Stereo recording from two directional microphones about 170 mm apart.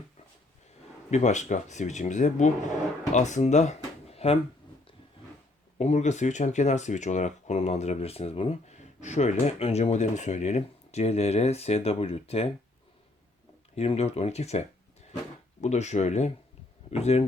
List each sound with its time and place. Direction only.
1.1 s speech: 45° left (ahead or behind)
5.7 s speech: 40° left (ahead or behind)
13.7 s speech: 40° left (ahead or behind)
15.6 s speech: 40° left (ahead or behind)